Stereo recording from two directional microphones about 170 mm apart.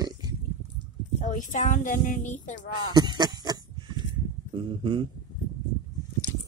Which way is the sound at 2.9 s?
25° right (ahead or behind).